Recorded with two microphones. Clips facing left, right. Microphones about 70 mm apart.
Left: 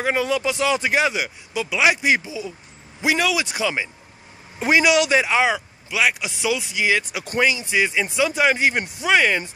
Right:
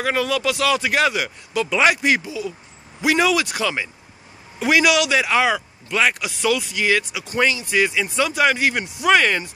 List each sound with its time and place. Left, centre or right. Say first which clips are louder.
0.0 s a man's voice: even; left
3.3 s speech: right 1 dB; centre
4.6 s a man's voice: even; left
5.3 s speech: right 1 dB; centre
5.9 s speech: right 1 dB; centre
6.2 s speech: right 3 dB; centre
7.1 s speech: left 1 dB; left
7.3 s a man's voice: right 1 dB; centre
9.0 s speech: right 2 dB; centre